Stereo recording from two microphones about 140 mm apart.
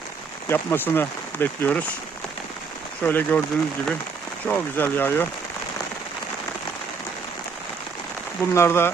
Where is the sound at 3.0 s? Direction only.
10° left (ahead or behind).